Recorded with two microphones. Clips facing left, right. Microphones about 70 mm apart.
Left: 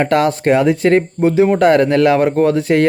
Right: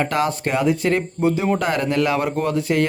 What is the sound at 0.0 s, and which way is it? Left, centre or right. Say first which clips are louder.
Speech: left 7 dB; left.